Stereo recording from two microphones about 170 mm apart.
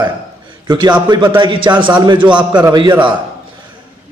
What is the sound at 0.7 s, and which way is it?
A man's voice, 25° right (ahead or behind).